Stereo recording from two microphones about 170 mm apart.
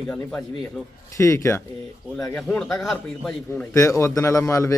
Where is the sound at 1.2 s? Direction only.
15° left (ahead or behind).